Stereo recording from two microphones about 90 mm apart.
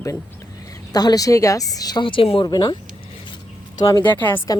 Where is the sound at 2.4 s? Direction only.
50° left (ahead or behind).